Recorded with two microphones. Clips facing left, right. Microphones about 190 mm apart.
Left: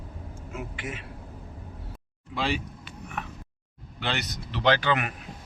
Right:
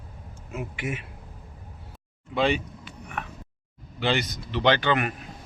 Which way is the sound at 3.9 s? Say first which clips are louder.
Right 6 dB; centre (ahead or behind).